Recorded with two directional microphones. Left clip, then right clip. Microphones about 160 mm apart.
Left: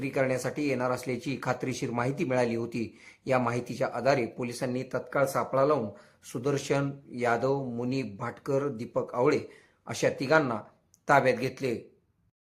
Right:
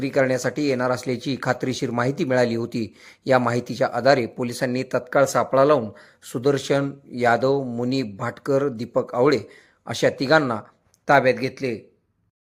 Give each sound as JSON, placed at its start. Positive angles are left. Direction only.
{"t": 0.0, "sound": "speech", "side_deg": -25}